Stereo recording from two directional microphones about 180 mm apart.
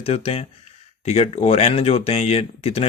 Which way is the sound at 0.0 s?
35° left (ahead or behind).